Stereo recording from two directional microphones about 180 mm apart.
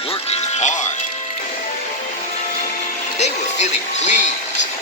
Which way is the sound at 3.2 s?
40° left (ahead or behind).